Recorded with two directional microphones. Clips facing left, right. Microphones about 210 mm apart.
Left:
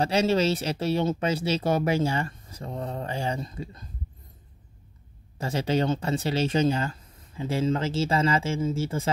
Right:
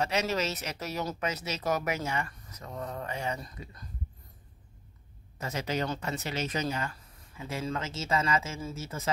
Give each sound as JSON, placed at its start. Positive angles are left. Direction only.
{"t": 0.0, "sound": "speech", "side_deg": 30}
{"t": 5.4, "sound": "speech", "side_deg": 30}